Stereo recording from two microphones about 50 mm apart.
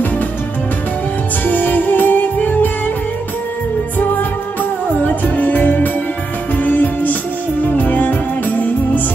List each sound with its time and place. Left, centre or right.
1.4 s music: left
4.0 s music: left